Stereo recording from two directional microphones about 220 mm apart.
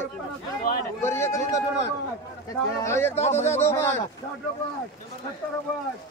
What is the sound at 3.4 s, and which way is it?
Speech, 10° left (ahead or behind).